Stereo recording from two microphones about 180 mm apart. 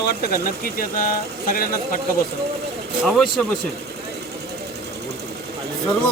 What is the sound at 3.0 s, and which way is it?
Speech, centre (ahead or behind).